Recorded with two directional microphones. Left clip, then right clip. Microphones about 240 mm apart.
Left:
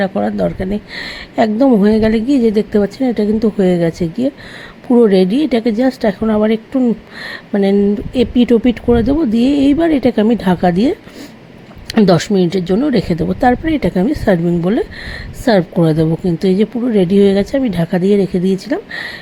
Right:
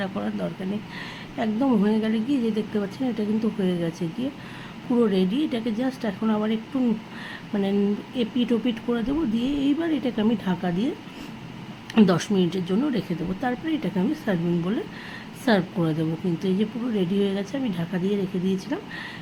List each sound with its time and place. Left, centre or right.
0.0 s speech: left
4.9 s speech: left